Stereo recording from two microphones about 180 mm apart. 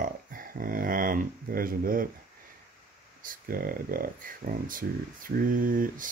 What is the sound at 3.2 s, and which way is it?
Speech, 50° right (ahead or behind).